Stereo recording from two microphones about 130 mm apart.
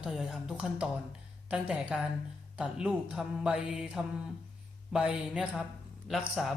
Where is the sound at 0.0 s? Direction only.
5° right (ahead or behind).